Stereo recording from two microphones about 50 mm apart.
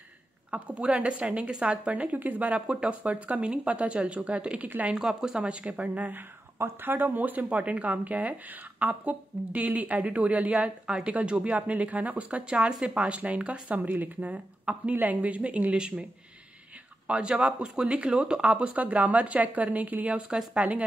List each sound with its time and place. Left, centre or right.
0.5 s speech: right
4.6 s speech: right
4.9 s speech: centre; by 6.2 s right
6.6 s speech: right
17.1 s speech: right